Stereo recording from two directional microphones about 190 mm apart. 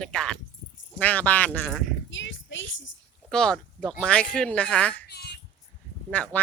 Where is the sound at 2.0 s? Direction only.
75° left (ahead or behind).